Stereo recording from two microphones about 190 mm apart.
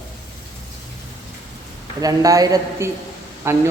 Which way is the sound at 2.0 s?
20° right (ahead or behind).